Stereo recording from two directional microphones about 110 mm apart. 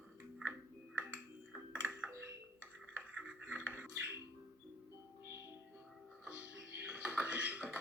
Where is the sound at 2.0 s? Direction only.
25° right (ahead or behind).